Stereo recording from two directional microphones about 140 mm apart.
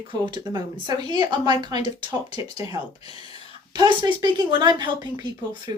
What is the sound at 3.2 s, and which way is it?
Speech, 30° right (ahead or behind).